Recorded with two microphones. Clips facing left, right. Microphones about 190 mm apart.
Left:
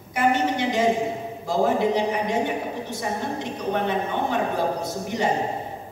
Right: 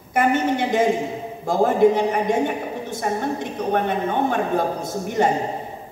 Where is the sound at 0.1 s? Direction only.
50° right (ahead or behind).